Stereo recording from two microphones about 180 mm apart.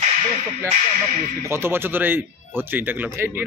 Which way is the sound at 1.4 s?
15° right (ahead or behind).